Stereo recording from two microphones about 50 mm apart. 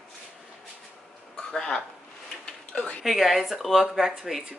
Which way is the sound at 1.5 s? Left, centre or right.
Centre.